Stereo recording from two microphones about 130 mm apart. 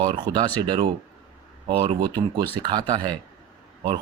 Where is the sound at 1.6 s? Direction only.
45° right (ahead or behind).